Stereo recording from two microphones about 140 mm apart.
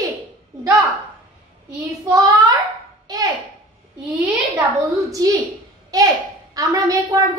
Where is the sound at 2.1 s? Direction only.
25° right (ahead or behind).